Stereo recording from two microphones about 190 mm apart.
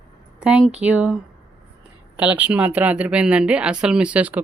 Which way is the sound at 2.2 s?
10° right (ahead or behind).